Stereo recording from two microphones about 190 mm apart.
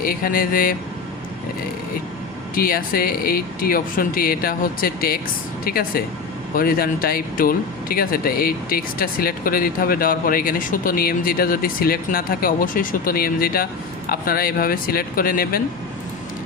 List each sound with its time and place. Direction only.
0.0 s speech: 50° left (ahead or behind)
2.6 s speech: 50° left (ahead or behind)